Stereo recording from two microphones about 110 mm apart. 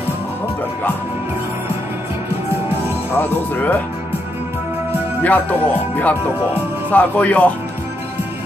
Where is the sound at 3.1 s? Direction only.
15° left (ahead or behind).